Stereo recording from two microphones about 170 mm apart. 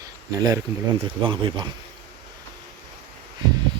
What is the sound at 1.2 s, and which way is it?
Speech, 30° right (ahead or behind).